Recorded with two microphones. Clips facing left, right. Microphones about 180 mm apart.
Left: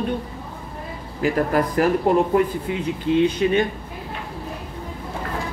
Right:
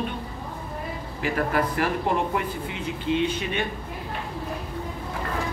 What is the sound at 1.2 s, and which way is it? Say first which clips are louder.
Speech: left 5 dB; 40° left (ahead or behind).